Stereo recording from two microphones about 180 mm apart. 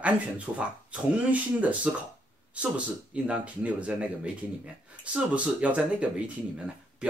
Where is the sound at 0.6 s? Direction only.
10° right (ahead or behind).